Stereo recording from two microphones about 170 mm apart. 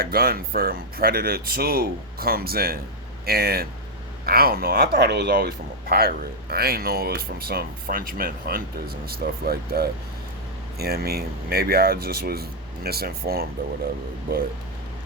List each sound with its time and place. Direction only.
0.0 s speech: 65° right (ahead or behind)